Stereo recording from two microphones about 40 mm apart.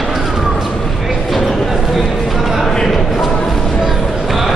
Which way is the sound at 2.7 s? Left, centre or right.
Centre.